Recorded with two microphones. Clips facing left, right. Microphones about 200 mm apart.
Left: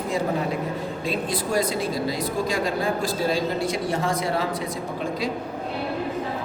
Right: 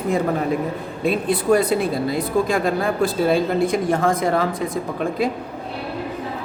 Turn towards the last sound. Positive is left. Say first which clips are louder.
# right 5 dB
turn(degrees=-55)  # may be behind; listen again after turning